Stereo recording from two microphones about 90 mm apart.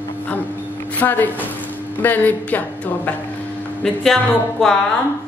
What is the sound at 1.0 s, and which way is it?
A woman's voice, 20° left (ahead or behind).